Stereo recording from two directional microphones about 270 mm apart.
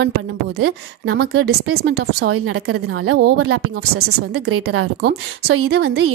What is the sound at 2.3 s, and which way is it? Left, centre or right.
A woman's voice, right.